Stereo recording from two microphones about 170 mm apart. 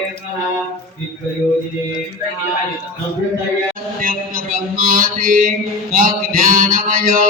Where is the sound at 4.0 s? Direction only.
55° right (ahead or behind).